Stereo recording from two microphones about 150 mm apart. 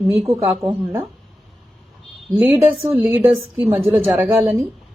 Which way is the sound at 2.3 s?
15° right (ahead or behind).